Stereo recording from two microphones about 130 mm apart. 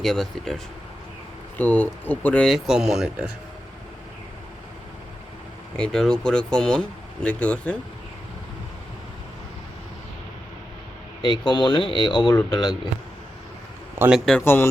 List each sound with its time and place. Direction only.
0.0 s speech: centre (ahead or behind)
1.5 s speech: 15° left (ahead or behind)
2.5 s speech: 5° right (ahead or behind)
5.7 s speech: 5° left (ahead or behind)
11.2 s speech: 35° left (ahead or behind)
14.1 s speech: 5° left (ahead or behind)
14.4 s speech: 15° left (ahead or behind)